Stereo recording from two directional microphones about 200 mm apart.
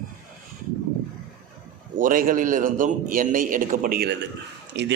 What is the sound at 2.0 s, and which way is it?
A man's voice, 45° right (ahead or behind).